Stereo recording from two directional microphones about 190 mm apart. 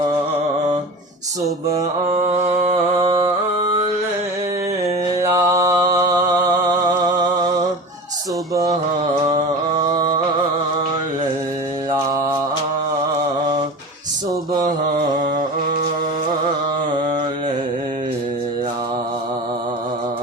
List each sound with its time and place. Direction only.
2.1 s music: 35° right (ahead or behind)
5.2 s mantra: 15° right (ahead or behind)
8.5 s a sound: 20° right (ahead or behind)